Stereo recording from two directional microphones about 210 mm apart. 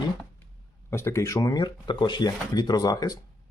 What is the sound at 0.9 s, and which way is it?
Speech, 15° left (ahead or behind).